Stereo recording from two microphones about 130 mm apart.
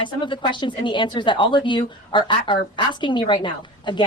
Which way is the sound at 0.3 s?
35° left (ahead or behind).